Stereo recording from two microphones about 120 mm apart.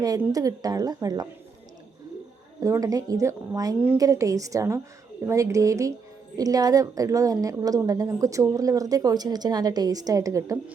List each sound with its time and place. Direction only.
0.3 s a woman's voice: 30° right (ahead or behind)
2.6 s a woman's voice: 25° right (ahead or behind)